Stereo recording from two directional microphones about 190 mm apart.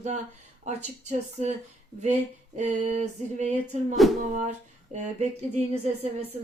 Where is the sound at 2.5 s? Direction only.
40° right (ahead or behind).